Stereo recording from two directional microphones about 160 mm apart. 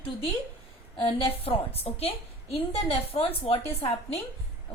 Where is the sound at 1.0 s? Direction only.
35° left (ahead or behind).